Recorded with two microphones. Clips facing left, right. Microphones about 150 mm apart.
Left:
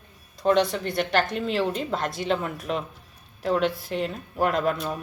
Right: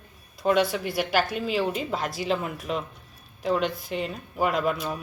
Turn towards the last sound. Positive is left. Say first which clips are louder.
# left 1 dB
turn(degrees=0)  # may be behind; listen again after turning